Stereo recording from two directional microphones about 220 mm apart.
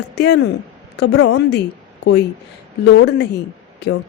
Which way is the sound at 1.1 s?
80° left.